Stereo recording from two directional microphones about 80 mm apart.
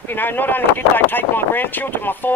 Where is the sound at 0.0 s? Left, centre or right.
Left.